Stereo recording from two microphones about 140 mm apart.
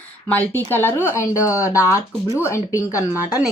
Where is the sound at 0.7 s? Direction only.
15° left (ahead or behind).